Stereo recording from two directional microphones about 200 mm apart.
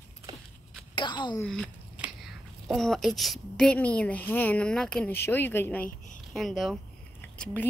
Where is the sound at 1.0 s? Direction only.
20° left (ahead or behind).